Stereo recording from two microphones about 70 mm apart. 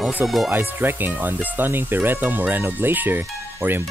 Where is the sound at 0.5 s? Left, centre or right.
Right.